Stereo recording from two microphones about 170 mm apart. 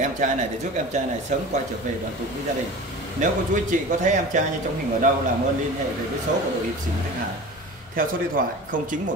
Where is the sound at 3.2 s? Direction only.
50° right (ahead or behind).